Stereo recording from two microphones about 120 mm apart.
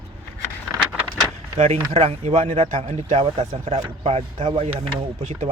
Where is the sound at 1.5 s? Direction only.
70° right (ahead or behind).